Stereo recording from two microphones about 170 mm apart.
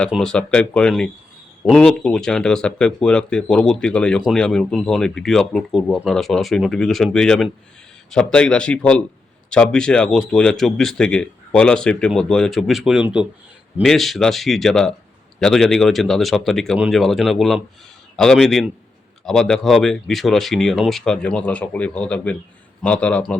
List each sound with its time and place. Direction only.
0.1 s speech: 5° left (ahead or behind)